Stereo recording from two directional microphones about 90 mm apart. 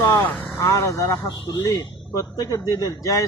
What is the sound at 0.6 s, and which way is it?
Speech, 35° left (ahead or behind).